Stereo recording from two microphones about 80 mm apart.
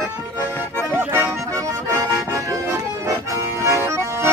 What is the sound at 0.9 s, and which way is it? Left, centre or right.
Accordion, right.